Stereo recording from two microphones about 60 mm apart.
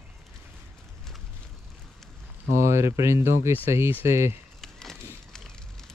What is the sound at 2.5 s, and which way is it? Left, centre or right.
Speech, right.